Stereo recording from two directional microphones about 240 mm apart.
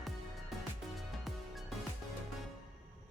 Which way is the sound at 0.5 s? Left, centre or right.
Centre.